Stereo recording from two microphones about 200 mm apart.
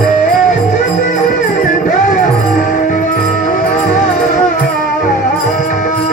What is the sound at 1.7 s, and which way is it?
Music, 40° left (ahead or behind).